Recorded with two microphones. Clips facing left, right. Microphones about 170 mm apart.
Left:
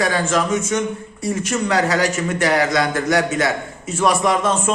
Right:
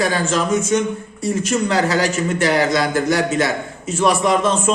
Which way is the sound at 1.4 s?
30° right (ahead or behind).